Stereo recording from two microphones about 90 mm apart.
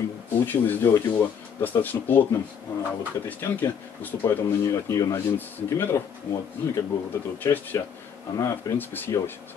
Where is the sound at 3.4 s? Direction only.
25° left (ahead or behind).